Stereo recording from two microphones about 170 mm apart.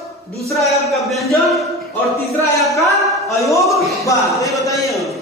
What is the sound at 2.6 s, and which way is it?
A man's voice, centre (ahead or behind).